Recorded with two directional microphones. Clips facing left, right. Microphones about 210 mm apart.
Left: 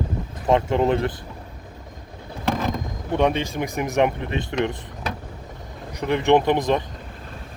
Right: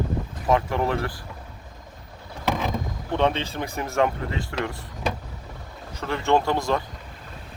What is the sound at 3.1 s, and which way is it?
Speech, 15° left (ahead or behind).